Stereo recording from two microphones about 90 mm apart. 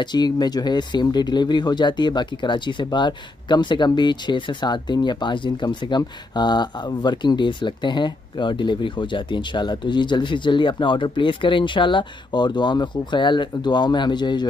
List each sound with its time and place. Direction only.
0.0 s speech: 50° left (ahead or behind)